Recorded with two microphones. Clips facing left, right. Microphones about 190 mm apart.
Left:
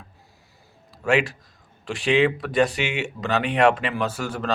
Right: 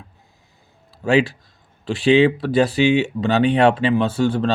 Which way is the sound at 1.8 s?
30° right (ahead or behind).